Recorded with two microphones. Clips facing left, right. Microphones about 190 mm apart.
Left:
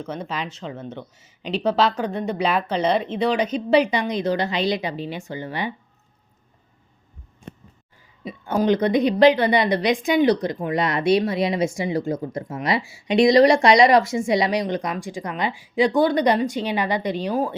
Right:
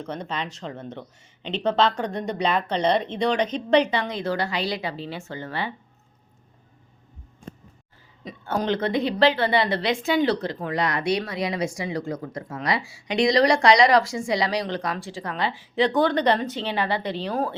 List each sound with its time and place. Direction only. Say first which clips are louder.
0.0 s a woman's voice: left 2 dB; 5° left (ahead or behind)
8.2 s a woman's voice: left 5 dB; 10° left (ahead or behind)